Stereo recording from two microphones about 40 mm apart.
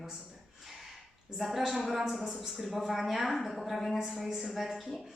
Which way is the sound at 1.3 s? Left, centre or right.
Centre.